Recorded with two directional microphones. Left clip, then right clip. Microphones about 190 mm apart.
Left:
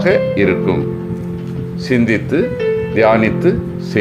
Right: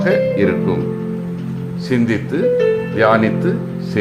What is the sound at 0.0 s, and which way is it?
Speech, 15° left (ahead or behind).